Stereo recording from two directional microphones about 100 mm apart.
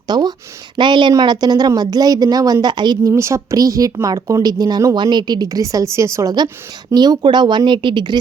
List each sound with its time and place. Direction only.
0.1 s a woman's voice: 45° right (ahead or behind)
3.1 s a woman's voice: 30° right (ahead or behind)
6.9 s speech: 45° right (ahead or behind)